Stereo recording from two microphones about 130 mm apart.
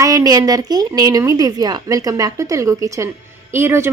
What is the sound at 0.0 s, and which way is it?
A woman's voice, 30° right (ahead or behind).